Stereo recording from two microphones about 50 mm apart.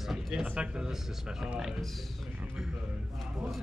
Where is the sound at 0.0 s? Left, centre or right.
Centre.